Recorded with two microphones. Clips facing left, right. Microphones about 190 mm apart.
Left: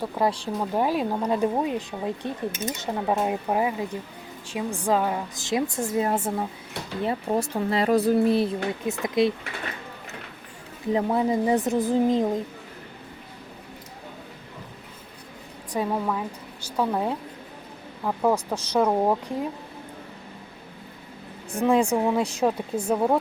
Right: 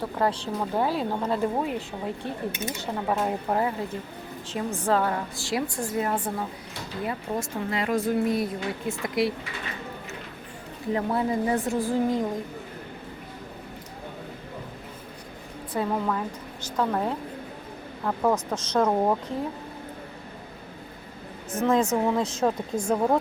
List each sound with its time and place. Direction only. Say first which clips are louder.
0.0 s a woman's voice: left 1 dB; 10° left (ahead or behind)
10.9 s a woman's voice: left 3 dB; 20° left (ahead or behind)
15.7 s speech: left 1 dB; 10° left (ahead or behind)
21.5 s speech: left 2 dB; 15° left (ahead or behind)